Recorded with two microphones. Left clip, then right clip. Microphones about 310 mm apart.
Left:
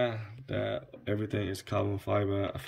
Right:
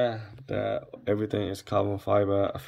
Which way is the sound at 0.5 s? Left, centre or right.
Centre.